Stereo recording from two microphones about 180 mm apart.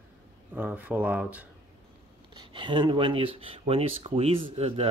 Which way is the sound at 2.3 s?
25° right (ahead or behind).